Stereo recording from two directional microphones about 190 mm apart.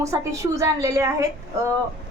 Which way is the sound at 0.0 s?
15° right (ahead or behind).